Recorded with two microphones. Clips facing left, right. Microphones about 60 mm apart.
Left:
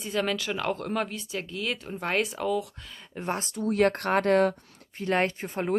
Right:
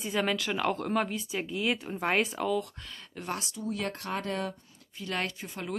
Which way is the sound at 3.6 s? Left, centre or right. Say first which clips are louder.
Left 12 dB; left.